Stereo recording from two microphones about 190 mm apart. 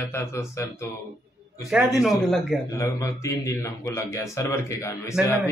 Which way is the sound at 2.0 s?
Centre (ahead or behind).